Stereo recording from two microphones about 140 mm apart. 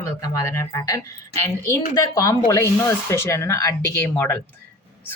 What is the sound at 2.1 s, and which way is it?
Speech, 25° left (ahead or behind).